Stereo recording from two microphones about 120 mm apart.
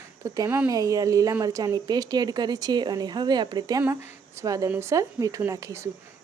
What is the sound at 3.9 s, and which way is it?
Speech, 20° right (ahead or behind).